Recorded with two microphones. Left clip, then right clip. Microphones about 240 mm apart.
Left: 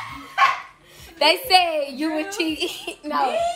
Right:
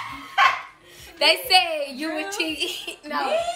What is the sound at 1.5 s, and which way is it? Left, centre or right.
A child's voice, centre.